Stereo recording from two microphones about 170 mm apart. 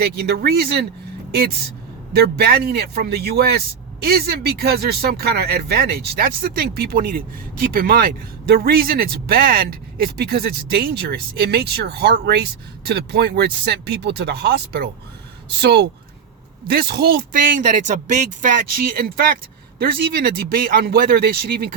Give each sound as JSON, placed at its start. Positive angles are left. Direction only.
{"t": 0.0, "sound": "speech", "side_deg": -65}
{"t": 2.1, "sound": "speech", "side_deg": -70}
{"t": 16.7, "sound": "speech", "side_deg": -70}